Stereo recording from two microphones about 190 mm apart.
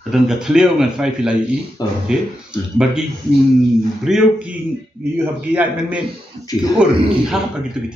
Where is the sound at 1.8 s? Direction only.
20° left (ahead or behind).